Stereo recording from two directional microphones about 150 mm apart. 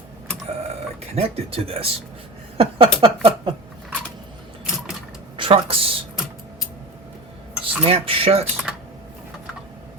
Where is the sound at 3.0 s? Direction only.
35° right (ahead or behind).